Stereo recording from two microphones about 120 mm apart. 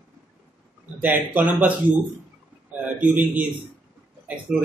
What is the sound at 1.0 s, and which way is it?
Speech, 15° right (ahead or behind).